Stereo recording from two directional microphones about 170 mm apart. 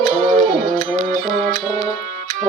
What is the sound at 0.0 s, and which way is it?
Music, 50° right (ahead or behind).